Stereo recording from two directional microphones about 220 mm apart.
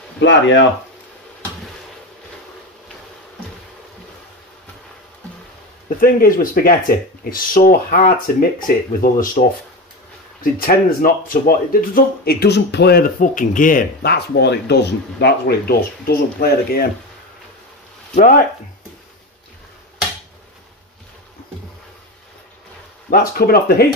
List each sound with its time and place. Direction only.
0.2 s speech: 55° left (ahead or behind)
5.9 s speech: 40° left (ahead or behind)
23.0 s speech: 45° left (ahead or behind)